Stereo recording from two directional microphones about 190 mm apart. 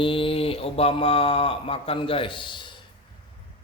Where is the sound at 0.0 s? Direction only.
25° left (ahead or behind).